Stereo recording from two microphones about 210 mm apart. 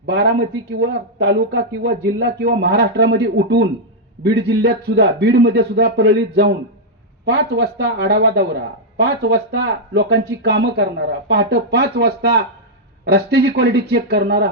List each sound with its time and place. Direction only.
0.0 s a man's voice: 55° right (ahead or behind)